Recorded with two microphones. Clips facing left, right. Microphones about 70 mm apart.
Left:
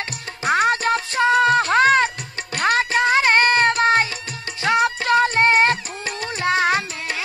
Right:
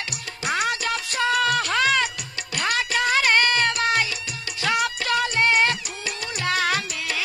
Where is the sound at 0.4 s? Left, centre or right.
Left.